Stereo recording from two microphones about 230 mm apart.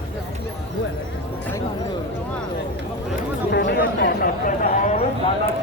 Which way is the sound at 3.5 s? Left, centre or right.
Left.